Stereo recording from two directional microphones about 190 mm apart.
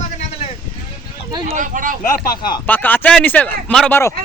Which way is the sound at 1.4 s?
45° right (ahead or behind).